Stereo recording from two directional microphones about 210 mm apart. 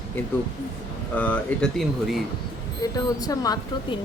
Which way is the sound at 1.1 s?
5° left (ahead or behind).